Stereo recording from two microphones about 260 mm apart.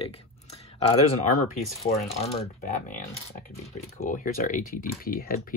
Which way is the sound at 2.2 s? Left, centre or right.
Left.